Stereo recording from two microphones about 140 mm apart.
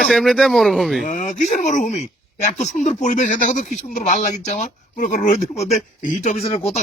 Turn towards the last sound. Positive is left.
turn(degrees=45)  # may be behind; listen again after turning